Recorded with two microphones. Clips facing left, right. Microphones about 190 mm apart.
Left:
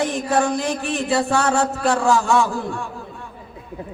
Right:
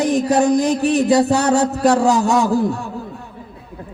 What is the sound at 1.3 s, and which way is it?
Music, 20° right (ahead or behind).